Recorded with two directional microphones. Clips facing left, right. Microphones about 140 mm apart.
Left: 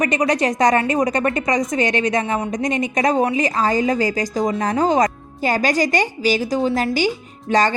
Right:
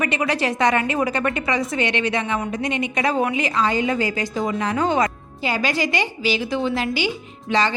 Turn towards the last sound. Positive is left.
turn(degrees=45)  # may be behind; listen again after turning